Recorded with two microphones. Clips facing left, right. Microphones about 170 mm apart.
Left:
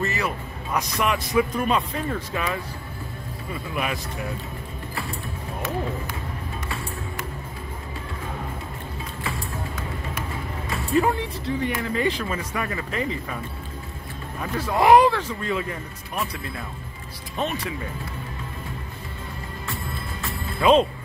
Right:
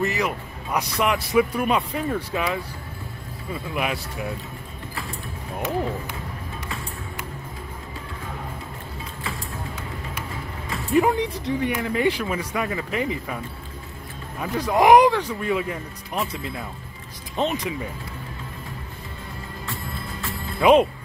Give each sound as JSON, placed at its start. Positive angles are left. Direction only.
{"t": 0.0, "sound": "a man's voice", "side_deg": -15}
{"t": 3.7, "sound": "a man's voice", "side_deg": -10}
{"t": 5.6, "sound": "speech", "side_deg": -15}
{"t": 11.0, "sound": "a man's voice", "side_deg": -15}
{"t": 14.4, "sound": "a man's voice", "side_deg": -15}
{"t": 20.6, "sound": "a man's voice", "side_deg": -15}